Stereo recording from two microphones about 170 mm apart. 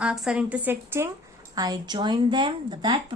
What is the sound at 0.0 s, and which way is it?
A woman's voice, 5° right (ahead or behind).